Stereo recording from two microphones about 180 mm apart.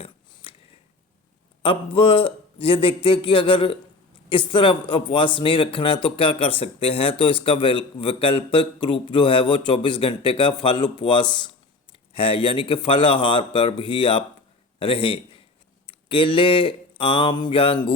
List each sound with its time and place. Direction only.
0.4 s a sound: 30° left (ahead or behind)
1.6 s a man's voice: 30° left (ahead or behind)
15.9 s mantra: 30° left (ahead or behind)